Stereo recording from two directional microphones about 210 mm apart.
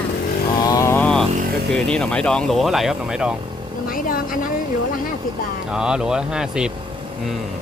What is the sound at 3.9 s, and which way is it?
Vehicle, 40° left (ahead or behind).